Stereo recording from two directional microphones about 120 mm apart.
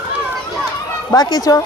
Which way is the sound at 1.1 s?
35° left (ahead or behind).